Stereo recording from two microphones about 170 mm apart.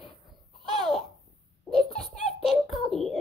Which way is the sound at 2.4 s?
Centre (ahead or behind).